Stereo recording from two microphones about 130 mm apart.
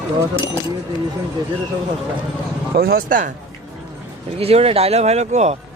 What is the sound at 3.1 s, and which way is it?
Speech, 90° right.